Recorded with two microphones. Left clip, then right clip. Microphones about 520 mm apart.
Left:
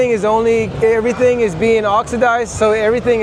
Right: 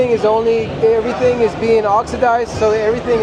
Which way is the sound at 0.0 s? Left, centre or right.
Left.